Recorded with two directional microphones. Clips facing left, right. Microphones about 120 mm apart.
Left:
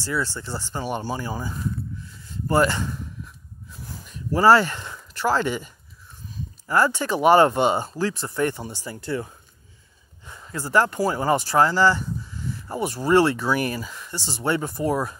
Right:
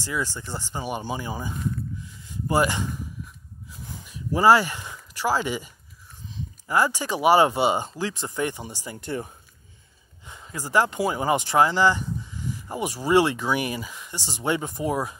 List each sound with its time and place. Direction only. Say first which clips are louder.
0.0 s speech: left 2 dB; 15° right (ahead or behind)
2.0 s a sound: even; 15° right (ahead or behind)
6.3 s speech: left 2 dB; 15° right (ahead or behind)